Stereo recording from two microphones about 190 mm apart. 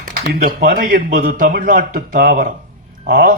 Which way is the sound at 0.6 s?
45° right (ahead or behind).